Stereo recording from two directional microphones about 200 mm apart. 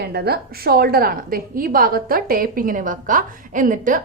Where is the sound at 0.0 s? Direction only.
55° right (ahead or behind).